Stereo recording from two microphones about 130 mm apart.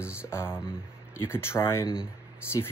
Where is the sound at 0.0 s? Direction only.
10° right (ahead or behind).